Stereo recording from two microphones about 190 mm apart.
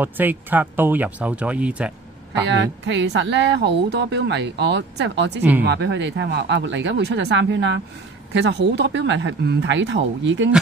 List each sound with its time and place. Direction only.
0.0 s speech: 10° right (ahead or behind)
2.4 s speech: 70° right (ahead or behind)